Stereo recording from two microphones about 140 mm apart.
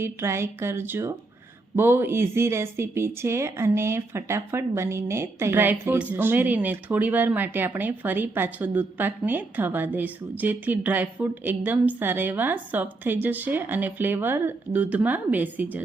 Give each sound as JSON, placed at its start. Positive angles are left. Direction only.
{"t": 0.0, "sound": "speech", "side_deg": -20}